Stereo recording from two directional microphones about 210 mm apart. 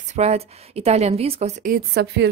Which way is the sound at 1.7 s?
50° right (ahead or behind).